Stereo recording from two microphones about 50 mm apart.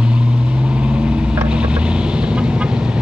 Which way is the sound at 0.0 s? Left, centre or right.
Centre.